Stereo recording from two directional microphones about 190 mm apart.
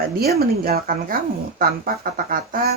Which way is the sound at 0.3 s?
50° right (ahead or behind).